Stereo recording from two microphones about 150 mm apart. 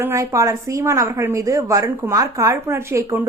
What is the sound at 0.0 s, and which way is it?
A woman's voice, 20° right (ahead or behind).